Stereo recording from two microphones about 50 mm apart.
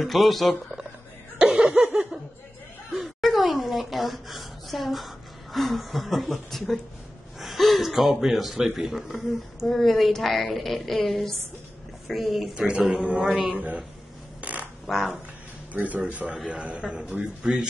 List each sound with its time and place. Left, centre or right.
0.0 s speech: centre
1.8 s a man's voice: centre
2.9 s speech: centre
12.5 s a man's voice: centre
13.6 s speech: right
14.4 s a sound: right
14.9 s speech: centre
15.7 s a man's voice: right; by 17.6 s centre